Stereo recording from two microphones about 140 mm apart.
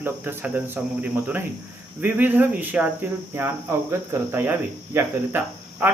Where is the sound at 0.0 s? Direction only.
15° right (ahead or behind).